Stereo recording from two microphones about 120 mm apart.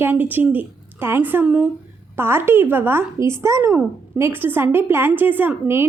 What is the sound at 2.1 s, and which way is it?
A woman's voice, 20° right (ahead or behind).